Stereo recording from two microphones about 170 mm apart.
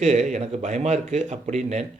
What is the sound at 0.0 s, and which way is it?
Speech, 40° right (ahead or behind).